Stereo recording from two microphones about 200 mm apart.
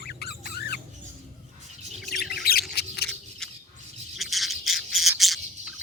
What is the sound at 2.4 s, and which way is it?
Squawk, 50° left (ahead or behind).